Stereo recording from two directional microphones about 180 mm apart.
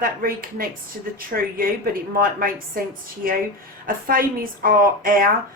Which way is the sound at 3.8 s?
50° right (ahead or behind).